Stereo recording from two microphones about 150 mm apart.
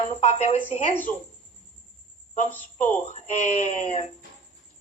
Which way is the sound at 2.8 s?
50° left (ahead or behind).